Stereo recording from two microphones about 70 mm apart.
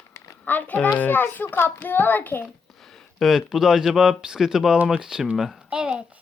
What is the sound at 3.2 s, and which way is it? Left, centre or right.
Speech, centre.